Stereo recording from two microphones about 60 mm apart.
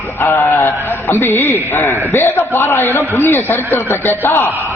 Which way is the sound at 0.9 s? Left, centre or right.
Left.